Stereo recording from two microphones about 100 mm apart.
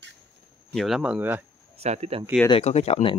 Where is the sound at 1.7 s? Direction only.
90° right.